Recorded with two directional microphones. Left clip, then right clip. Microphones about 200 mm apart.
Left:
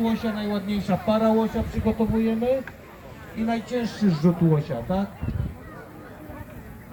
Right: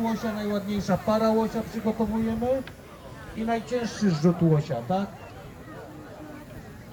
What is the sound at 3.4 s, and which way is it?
Speech, 55° left (ahead or behind).